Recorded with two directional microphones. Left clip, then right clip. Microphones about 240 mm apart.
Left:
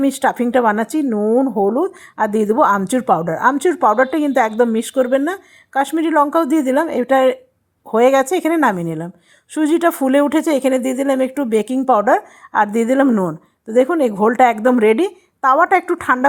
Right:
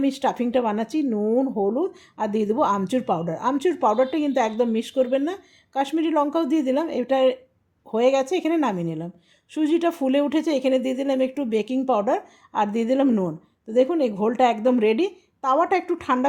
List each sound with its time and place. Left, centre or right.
0.0 s a woman's voice: centre